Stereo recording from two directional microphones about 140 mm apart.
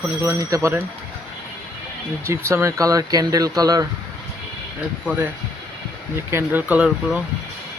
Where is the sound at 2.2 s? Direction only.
20° right (ahead or behind).